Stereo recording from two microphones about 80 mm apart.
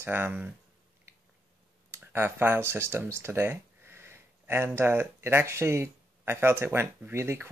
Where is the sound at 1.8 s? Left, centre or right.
Right.